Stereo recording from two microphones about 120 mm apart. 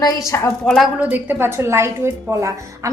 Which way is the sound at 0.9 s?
15° right (ahead or behind).